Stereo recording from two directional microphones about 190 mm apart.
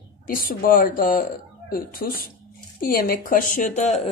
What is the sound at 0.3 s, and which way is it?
Speech, 50° left (ahead or behind).